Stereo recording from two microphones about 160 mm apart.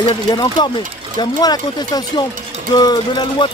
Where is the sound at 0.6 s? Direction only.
25° left (ahead or behind).